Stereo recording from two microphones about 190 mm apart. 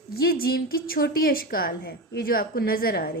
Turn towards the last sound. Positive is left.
turn(degrees=55)  # may be behind; listen again after turning